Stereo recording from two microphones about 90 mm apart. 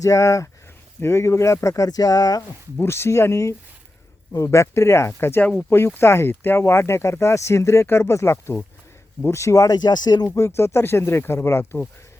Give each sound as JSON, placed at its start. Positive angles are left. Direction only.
{"t": 0.0, "sound": "speech", "side_deg": 35}
{"t": 2.8, "sound": "speech", "side_deg": 30}
{"t": 5.5, "sound": "speech", "side_deg": 10}
{"t": 5.7, "sound": "speech", "side_deg": 25}
{"t": 10.2, "sound": "speech", "side_deg": 35}